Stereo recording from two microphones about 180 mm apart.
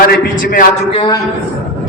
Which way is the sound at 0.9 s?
30° left (ahead or behind).